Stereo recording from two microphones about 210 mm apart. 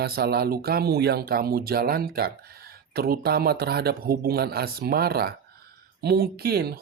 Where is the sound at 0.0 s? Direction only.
50° right (ahead or behind).